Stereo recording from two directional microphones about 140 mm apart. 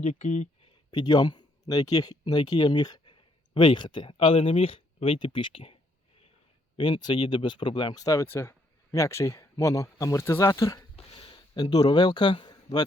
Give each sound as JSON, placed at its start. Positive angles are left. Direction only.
{"t": 0.0, "sound": "speech", "side_deg": 65}
{"t": 0.6, "sound": "speech", "side_deg": 30}
{"t": 6.7, "sound": "speech", "side_deg": 35}
{"t": 10.9, "sound": "a sound", "side_deg": 40}
{"t": 11.5, "sound": "speech", "side_deg": 30}